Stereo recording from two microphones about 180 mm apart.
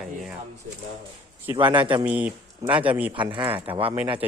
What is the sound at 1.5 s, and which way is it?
Speech, 25° right (ahead or behind).